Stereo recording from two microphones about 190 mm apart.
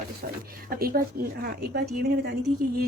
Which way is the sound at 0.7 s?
50° right (ahead or behind).